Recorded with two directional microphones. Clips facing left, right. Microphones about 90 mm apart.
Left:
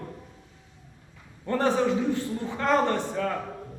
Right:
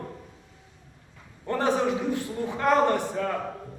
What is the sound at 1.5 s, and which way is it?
Speech, 15° right (ahead or behind).